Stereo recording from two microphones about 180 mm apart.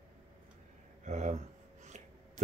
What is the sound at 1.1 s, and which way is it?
Speech, 40° right (ahead or behind).